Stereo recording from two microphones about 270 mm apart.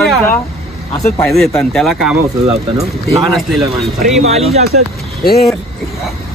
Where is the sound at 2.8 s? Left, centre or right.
Right.